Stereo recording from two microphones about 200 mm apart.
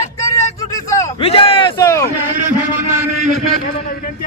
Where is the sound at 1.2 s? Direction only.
30° left (ahead or behind).